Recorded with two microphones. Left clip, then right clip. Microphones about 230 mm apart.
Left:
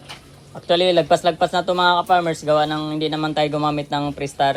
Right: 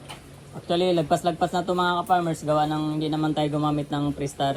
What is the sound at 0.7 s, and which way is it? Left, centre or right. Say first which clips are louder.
A man's voice: left 7 dB; centre.